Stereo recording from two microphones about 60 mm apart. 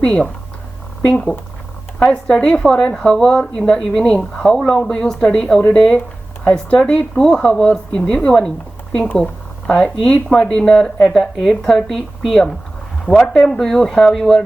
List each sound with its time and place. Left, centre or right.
0.0 s speech: centre
2.0 s speech: centre
5.5 s speech: left